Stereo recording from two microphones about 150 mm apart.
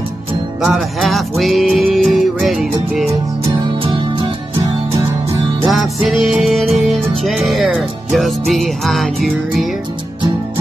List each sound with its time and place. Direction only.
0.7 s music: centre (ahead or behind)
3.1 s music: 20° right (ahead or behind)
3.8 s music: 35° right (ahead or behind)
5.7 s music: centre (ahead or behind)